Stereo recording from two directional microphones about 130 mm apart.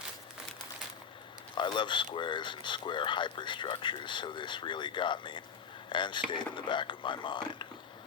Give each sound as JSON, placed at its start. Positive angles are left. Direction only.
{"t": 1.5, "sound": "speech", "side_deg": 35}